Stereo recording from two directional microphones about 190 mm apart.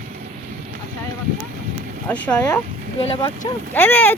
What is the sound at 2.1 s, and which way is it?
Speech, 10° left (ahead or behind).